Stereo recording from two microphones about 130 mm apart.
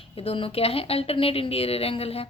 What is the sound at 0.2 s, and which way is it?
A woman's voice, 45° left (ahead or behind).